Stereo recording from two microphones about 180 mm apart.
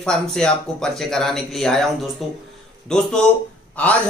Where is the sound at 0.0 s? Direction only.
5° left (ahead or behind).